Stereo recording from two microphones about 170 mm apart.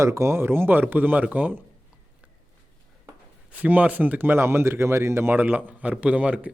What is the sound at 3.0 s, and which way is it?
Speech, 10° right (ahead or behind).